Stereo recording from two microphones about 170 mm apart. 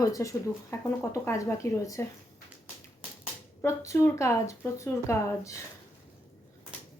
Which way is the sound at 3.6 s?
15° left (ahead or behind).